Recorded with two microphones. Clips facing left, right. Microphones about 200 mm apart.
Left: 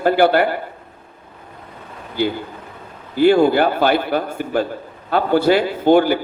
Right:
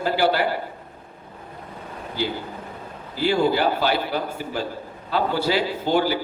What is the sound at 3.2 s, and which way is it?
A man's voice, 55° left (ahead or behind).